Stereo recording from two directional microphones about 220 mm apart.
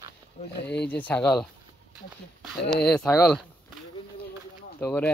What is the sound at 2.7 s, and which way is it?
Speech, 5° left (ahead or behind).